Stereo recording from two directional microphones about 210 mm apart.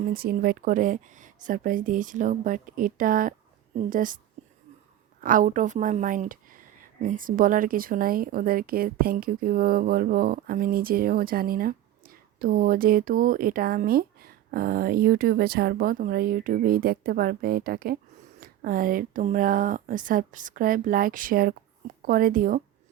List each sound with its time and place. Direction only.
0.1 s speech: 45° right (ahead or behind)
4.4 s whispering: 35° right (ahead or behind)
5.2 s a woman's voice: 40° right (ahead or behind)